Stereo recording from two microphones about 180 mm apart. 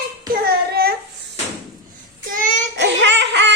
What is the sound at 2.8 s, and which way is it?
Music, 80° right.